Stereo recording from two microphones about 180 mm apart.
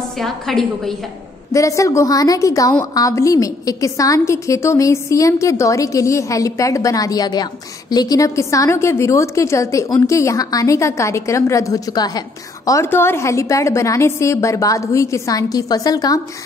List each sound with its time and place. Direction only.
0.2 s a woman's voice: centre (ahead or behind)
1.5 s a woman's voice: 15° left (ahead or behind)